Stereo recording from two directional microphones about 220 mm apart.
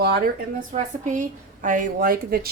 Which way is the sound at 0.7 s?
35° right (ahead or behind).